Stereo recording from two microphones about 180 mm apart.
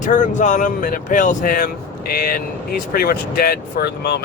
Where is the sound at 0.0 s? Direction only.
45° left (ahead or behind).